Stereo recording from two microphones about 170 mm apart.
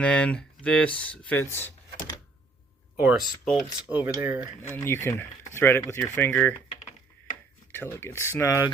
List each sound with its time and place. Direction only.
0.0 s speech: 5° left (ahead or behind)
3.0 s speech: 5° right (ahead or behind)
3.8 s cutlery: 10° right (ahead or behind)
4.7 s speech: 15° left (ahead or behind)
7.7 s speech: 15° left (ahead or behind)